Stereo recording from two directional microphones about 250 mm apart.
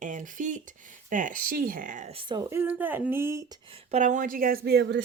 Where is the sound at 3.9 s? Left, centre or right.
Right.